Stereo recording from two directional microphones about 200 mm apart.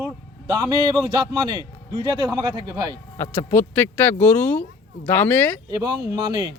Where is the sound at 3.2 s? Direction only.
10° left (ahead or behind).